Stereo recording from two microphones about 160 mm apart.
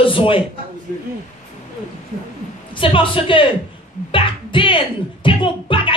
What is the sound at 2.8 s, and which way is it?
Speech, 35° left (ahead or behind).